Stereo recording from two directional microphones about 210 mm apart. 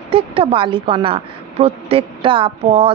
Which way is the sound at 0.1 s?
25° right (ahead or behind).